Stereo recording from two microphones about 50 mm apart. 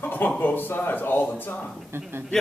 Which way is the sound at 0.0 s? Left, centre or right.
Left.